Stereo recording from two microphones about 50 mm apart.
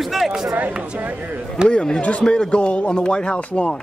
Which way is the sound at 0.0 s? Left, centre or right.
Centre.